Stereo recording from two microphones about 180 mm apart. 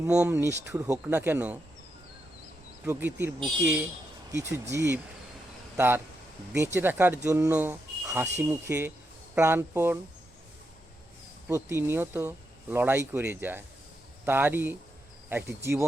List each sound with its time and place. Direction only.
0.0 s speech: 10° right (ahead or behind)
2.8 s speech: 15° right (ahead or behind)
11.4 s speech: 15° right (ahead or behind)